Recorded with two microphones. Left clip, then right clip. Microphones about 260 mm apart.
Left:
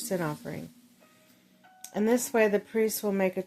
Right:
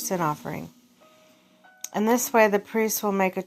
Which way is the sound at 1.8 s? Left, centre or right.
Centre.